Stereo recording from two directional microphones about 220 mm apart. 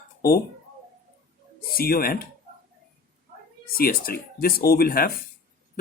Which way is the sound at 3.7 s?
40° left (ahead or behind).